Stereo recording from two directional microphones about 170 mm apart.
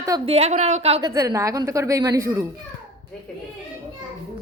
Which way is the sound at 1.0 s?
20° right (ahead or behind).